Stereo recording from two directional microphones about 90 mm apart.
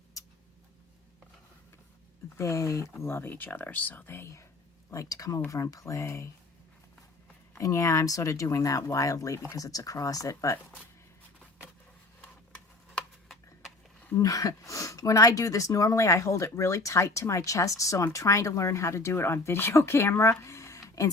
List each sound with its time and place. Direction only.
0.2 s tick-tock: 35° left (ahead or behind)
2.4 s speech: 35° left (ahead or behind)
4.9 s speech: 40° left (ahead or behind)
7.6 s speech: 35° left (ahead or behind)
12.2 s a sound: 10° left (ahead or behind)
14.2 s speech: 40° left (ahead or behind)
20.4 s a sound: 35° left (ahead or behind)